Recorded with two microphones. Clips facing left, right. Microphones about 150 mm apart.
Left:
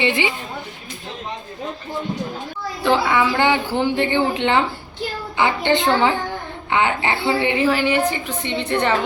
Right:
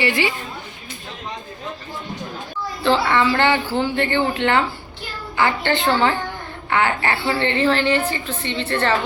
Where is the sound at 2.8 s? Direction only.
10° left (ahead or behind).